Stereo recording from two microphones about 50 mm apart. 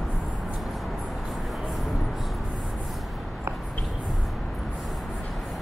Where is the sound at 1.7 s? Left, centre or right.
Centre.